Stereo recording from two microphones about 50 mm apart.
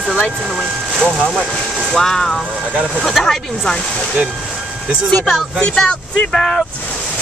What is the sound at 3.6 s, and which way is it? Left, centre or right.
Speech, centre.